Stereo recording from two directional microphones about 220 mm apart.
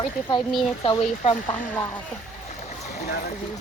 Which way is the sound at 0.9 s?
25° left (ahead or behind).